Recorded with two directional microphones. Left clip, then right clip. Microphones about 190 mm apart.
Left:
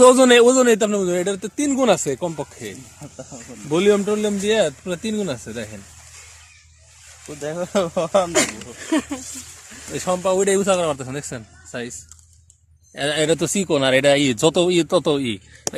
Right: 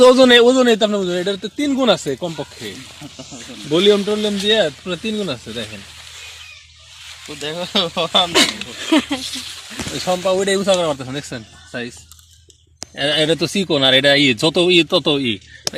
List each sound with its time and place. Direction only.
0.0 s speech: 15° left (ahead or behind)
7.4 s speech: 65° left (ahead or behind)
8.8 s speech: 25° right (ahead or behind)
10.0 s speech: 5° left (ahead or behind)
13.0 s speech: 10° left (ahead or behind)